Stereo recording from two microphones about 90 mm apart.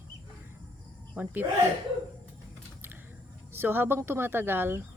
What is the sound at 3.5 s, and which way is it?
A woman's voice, 25° right (ahead or behind).